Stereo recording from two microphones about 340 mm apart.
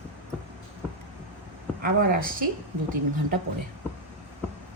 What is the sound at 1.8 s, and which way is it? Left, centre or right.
Speech, right.